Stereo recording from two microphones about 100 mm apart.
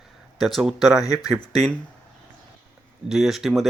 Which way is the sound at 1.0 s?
35° left (ahead or behind).